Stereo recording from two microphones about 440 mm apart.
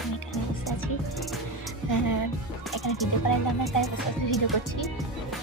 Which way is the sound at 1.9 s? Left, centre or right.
Left.